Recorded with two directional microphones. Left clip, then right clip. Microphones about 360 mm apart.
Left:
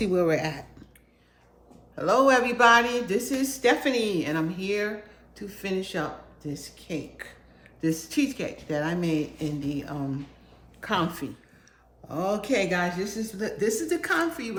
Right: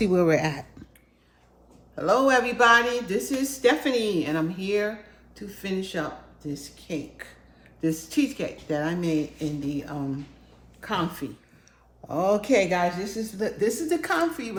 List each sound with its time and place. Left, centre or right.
0.0 s a woman's voice: centre
2.0 s a woman's voice: centre
12.0 s a woman's voice: centre